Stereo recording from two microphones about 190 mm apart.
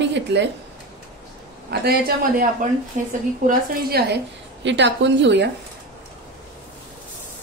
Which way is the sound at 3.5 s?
55° right (ahead or behind).